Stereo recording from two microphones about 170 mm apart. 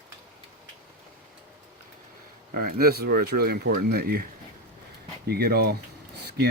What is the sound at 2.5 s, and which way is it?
Speech, 60° right (ahead or behind).